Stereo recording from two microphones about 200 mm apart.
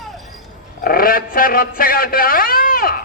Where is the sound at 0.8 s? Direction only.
45° left (ahead or behind).